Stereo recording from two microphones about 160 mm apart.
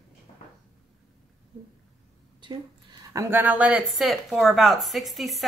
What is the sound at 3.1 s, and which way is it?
Speech, 10° right (ahead or behind).